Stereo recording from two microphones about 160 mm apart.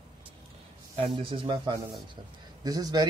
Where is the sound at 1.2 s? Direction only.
30° right (ahead or behind).